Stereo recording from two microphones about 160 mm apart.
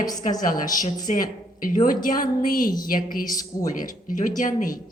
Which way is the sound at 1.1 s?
45° left (ahead or behind).